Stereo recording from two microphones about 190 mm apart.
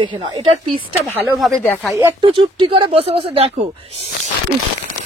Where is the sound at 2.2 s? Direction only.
25° right (ahead or behind).